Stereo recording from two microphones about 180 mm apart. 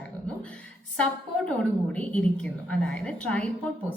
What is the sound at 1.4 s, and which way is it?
A woman's voice, 5° left (ahead or behind).